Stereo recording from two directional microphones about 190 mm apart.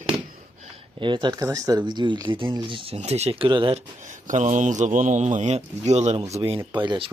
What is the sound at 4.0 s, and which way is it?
A man's voice, 40° right (ahead or behind).